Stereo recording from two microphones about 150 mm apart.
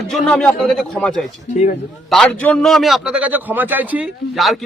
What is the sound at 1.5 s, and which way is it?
Speech, 60° left (ahead or behind).